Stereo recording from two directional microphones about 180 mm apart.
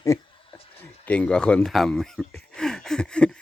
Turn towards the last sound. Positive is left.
turn(degrees=5)  # may be behind; listen again after turning